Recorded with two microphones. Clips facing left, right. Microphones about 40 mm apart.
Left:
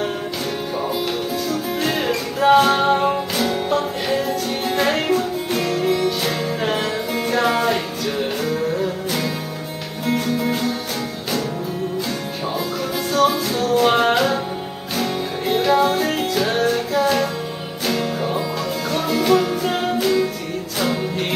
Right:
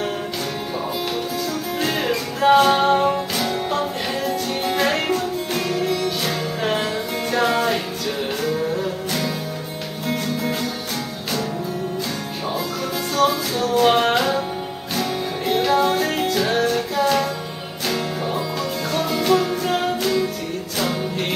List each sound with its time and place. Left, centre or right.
1.5 s music: centre
13.1 s music: centre